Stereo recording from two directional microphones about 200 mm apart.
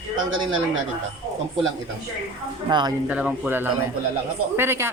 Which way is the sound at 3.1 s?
5° right (ahead or behind).